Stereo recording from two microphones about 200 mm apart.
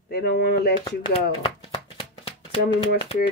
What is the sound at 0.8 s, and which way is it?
Speech, 25° left (ahead or behind).